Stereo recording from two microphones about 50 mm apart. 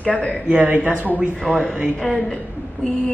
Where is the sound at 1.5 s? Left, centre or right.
Centre.